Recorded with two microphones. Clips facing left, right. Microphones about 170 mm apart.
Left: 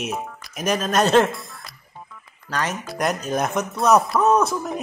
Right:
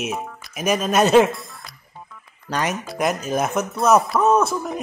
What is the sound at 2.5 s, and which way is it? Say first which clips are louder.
Speech: right 2 dB; 15° right (ahead or behind).